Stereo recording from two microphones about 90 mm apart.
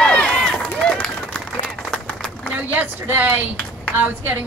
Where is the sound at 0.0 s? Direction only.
10° left (ahead or behind).